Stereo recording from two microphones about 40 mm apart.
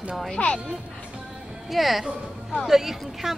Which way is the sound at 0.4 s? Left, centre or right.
Left.